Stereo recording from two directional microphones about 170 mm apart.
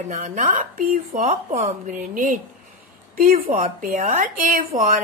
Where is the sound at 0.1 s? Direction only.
45° right (ahead or behind).